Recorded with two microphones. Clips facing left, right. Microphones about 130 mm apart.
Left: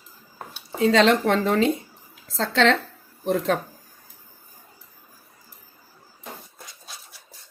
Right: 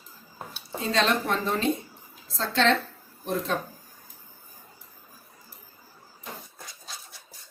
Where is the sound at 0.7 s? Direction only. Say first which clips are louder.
Left 7 dB; 90° left.